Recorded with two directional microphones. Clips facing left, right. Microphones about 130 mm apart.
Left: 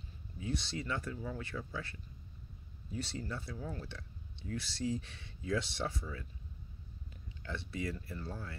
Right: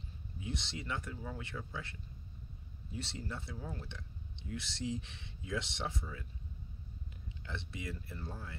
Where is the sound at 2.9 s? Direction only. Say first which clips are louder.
Left 3 dB; 25° right (ahead or behind).